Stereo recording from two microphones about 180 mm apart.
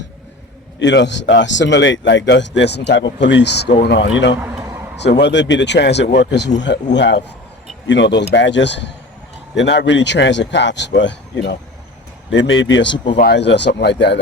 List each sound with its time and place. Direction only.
0.8 s speech: 80° left
3.8 s speech: 85° left
4.4 s a sound: 15° right (ahead or behind)
4.9 s speech: 70° left (ahead or behind)
12.3 s speech: 90° left
13.1 s speech: 65° left (ahead or behind)